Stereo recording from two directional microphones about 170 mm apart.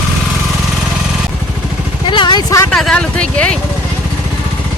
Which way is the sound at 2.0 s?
25° left (ahead or behind).